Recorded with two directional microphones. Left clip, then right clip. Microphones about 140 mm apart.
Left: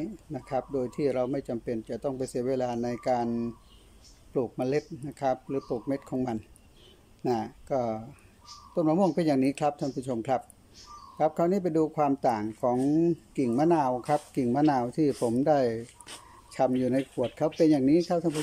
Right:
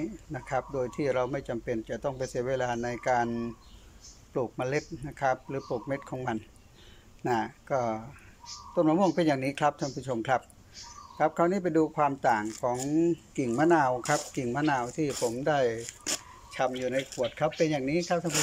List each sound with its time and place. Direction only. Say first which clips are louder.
0.0 s speech: even; 30° left (ahead or behind)